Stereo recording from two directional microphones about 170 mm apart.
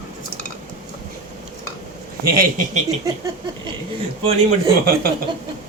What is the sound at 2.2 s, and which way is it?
Speech, 55° right (ahead or behind).